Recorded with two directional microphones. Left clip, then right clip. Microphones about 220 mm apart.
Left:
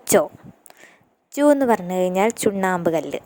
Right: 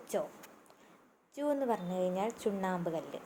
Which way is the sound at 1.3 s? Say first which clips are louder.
Left 17 dB; 50° left (ahead or behind).